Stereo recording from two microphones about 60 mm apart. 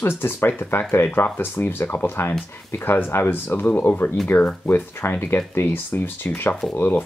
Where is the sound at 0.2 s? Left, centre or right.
Left.